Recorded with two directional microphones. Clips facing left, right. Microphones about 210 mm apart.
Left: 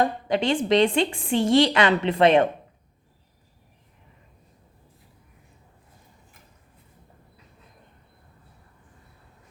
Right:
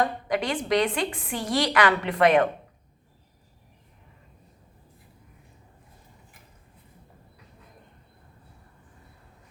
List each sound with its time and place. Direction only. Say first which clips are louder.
0.0 s a woman's voice: left 3 dB; 25° left (ahead or behind)